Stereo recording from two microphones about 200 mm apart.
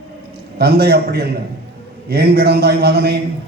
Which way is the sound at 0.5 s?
55° right (ahead or behind).